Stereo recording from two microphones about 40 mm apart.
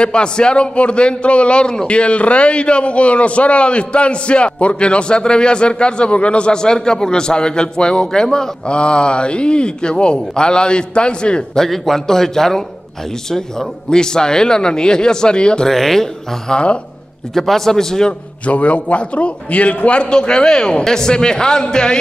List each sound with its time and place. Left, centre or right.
0.0 s a man's voice: left
11.5 s a man's voice: centre; by 15.7 s left
15.7 s a man's voice: centre
18.4 s a man's voice: left
20.1 s a man's voice: left